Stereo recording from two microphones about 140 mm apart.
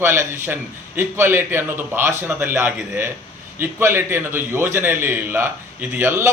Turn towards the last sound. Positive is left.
turn(degrees=-20)  # may be behind; listen again after turning